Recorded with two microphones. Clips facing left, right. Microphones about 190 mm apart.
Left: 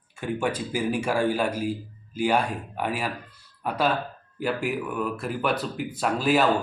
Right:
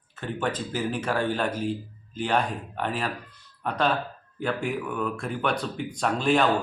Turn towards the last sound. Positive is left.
turn(degrees=5)  # may be behind; listen again after turning